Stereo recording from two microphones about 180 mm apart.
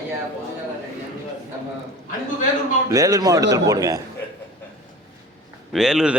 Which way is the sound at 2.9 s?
20° right (ahead or behind).